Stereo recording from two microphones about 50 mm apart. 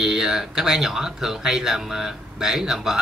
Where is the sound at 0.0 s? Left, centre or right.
Centre.